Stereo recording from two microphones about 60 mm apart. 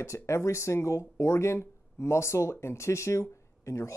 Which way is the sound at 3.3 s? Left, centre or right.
Left.